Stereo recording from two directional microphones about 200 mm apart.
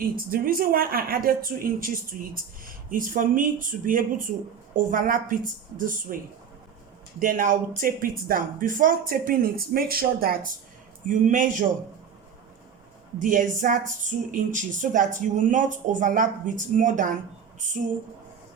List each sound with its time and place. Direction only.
0.3 s speech: 45° right (ahead or behind)
7.2 s speech: 40° right (ahead or behind)
13.1 s speech: 40° right (ahead or behind)